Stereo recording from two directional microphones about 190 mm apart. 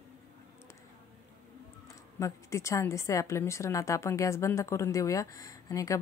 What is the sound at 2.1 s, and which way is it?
A woman's voice, 15° left (ahead or behind).